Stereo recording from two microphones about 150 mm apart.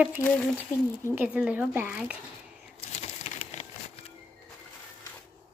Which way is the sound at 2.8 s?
45° left (ahead or behind).